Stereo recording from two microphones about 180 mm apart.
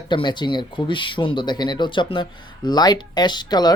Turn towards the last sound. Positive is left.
turn(degrees=25)  # may be behind; listen again after turning